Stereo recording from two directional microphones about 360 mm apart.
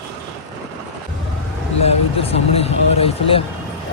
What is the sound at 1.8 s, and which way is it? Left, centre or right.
Vehicle, centre.